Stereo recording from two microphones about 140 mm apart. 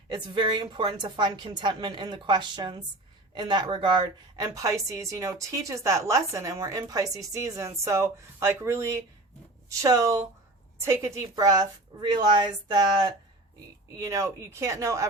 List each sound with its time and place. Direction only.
0.1 s a woman's voice: 35° right (ahead or behind)
4.4 s a woman's voice: 20° right (ahead or behind)